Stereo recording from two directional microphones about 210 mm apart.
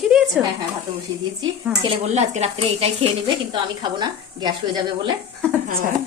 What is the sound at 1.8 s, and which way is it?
A woman's voice, 25° right (ahead or behind).